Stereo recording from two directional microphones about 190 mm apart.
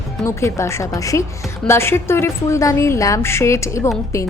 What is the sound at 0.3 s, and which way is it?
A woman's voice, 15° left (ahead or behind).